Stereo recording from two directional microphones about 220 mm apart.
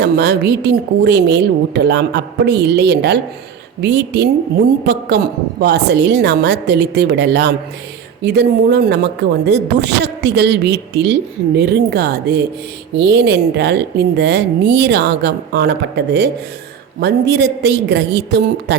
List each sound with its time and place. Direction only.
0.0 s a woman's voice: 50° right (ahead or behind)